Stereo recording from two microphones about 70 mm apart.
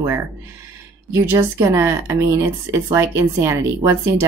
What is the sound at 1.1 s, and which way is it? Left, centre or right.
Speech, right.